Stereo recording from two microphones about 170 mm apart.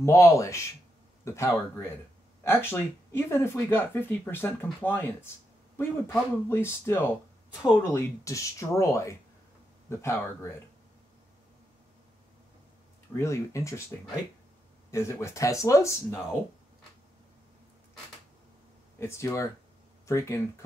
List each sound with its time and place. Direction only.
0.0 s speech: 15° left (ahead or behind)
13.1 s speech: 15° left (ahead or behind)
14.9 s speech: 15° left (ahead or behind)
18.9 s speech: 15° left (ahead or behind)